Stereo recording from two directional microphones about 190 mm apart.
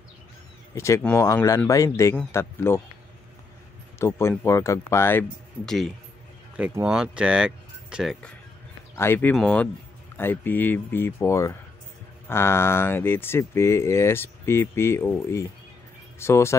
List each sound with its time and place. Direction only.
0.7 s speech: 15° left (ahead or behind)
4.0 s speech: 15° left (ahead or behind)
5.7 s speech: centre (ahead or behind)